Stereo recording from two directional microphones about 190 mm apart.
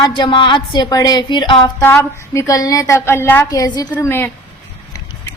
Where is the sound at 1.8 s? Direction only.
15° left (ahead or behind).